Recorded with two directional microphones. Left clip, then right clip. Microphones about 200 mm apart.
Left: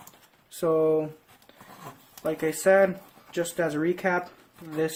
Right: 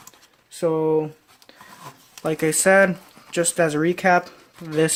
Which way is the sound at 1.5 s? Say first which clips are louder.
Right 6 dB; 50° right (ahead or behind).